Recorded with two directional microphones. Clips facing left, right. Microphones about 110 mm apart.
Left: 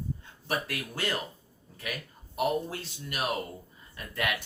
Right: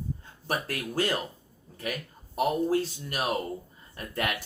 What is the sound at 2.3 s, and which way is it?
Speech, 40° right (ahead or behind).